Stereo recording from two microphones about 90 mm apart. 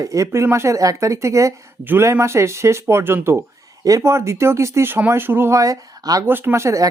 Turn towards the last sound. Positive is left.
turn(degrees=-35)  # may be behind; listen again after turning